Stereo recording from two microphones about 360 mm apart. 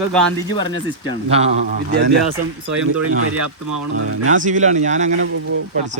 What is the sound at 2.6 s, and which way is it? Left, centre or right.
Speech, right.